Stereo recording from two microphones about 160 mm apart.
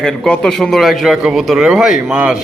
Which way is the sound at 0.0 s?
5° left (ahead or behind).